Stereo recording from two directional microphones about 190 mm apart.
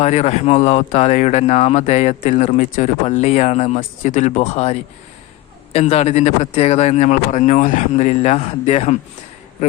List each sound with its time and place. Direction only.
0.0 s speech: 35° left (ahead or behind)